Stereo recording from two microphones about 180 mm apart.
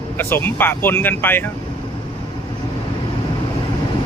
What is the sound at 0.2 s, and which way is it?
Speech, 10° left (ahead or behind).